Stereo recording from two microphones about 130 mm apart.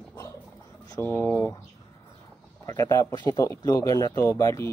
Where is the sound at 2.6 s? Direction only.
25° left (ahead or behind).